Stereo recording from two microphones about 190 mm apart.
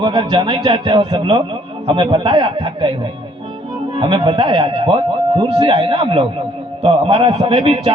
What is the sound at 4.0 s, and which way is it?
A man's voice, 25° right (ahead or behind).